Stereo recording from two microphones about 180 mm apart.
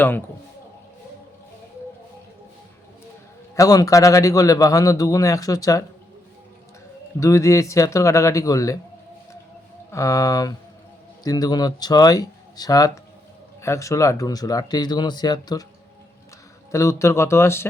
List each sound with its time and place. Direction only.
3.5 s a man's voice: 20° left (ahead or behind)
7.2 s speech: 15° left (ahead or behind)
9.9 s a man's voice: 15° left (ahead or behind)
16.7 s speech: 15° left (ahead or behind)